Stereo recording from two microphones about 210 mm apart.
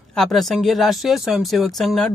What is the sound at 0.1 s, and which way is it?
Speech, centre (ahead or behind).